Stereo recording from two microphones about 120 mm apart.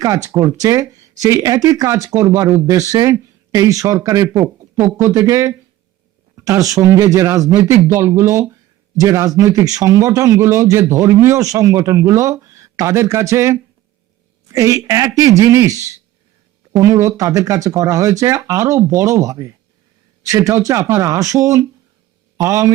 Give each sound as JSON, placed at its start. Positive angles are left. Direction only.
{"t": 0.0, "sound": "speech", "side_deg": -30}
{"t": 16.8, "sound": "speech", "side_deg": -25}